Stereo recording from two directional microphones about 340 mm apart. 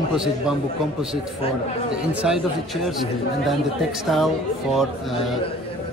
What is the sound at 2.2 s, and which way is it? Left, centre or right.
Speech, centre.